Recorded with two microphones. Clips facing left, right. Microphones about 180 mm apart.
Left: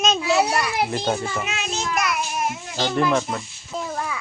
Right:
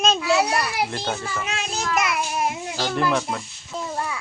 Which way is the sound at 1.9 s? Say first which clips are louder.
Right 2 dB; 25° right (ahead or behind).